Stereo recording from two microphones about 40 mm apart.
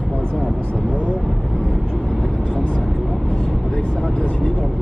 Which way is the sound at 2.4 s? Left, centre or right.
Left.